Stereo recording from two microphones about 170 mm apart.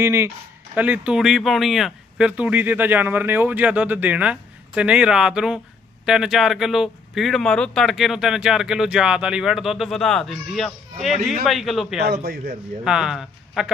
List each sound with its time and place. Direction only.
0.0 s speech: 15° right (ahead or behind); by 11.9 s centre (ahead or behind)
12.0 s a man's voice: 65° right (ahead or behind)
12.8 s speech: 5° right (ahead or behind)